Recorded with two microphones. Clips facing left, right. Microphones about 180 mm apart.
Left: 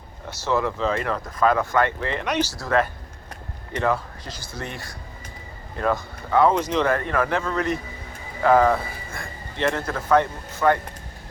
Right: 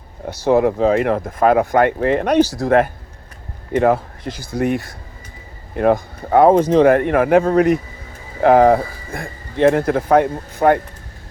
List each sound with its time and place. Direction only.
0.3 s speech: 55° right (ahead or behind)
3.7 s speech: 55° right (ahead or behind)
5.7 s speech: 55° right (ahead or behind)